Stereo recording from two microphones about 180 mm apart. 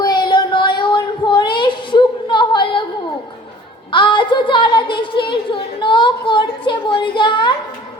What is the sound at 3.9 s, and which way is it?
A woman's voice, 25° left (ahead or behind).